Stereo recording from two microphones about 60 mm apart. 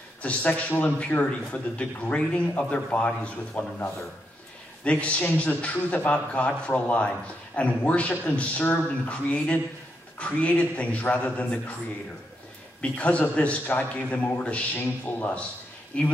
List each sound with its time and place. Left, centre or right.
0.2 s a man's voice: left
12.8 s a man's voice: left